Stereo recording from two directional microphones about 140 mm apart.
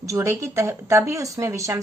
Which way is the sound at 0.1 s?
20° right (ahead or behind).